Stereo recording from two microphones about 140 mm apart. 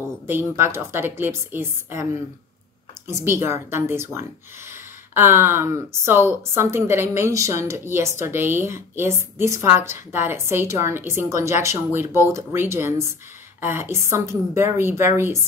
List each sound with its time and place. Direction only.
0.3 s a woman's voice: 15° right (ahead or behind)
3.1 s a woman's voice: 20° right (ahead or behind)
5.1 s a woman's voice: 15° right (ahead or behind)